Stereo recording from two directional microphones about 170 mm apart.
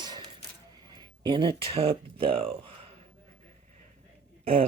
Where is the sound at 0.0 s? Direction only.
25° right (ahead or behind).